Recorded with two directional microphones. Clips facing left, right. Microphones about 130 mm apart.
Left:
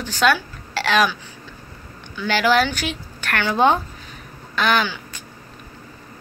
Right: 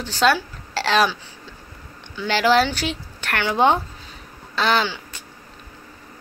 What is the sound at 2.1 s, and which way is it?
Speech, 25° right (ahead or behind).